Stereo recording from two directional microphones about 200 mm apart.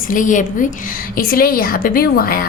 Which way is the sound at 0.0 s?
40° left (ahead or behind).